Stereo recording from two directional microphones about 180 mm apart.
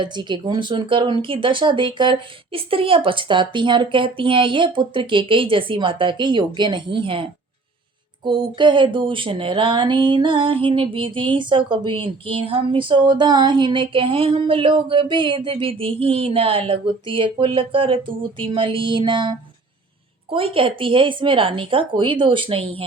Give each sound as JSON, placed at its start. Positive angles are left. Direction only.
{"t": 0.0, "sound": "speech", "side_deg": -25}